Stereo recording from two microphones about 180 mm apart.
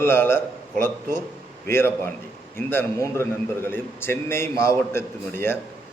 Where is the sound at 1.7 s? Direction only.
15° left (ahead or behind).